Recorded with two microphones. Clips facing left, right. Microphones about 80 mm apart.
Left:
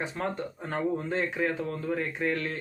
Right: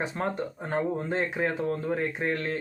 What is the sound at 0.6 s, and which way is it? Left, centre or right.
Speech, right.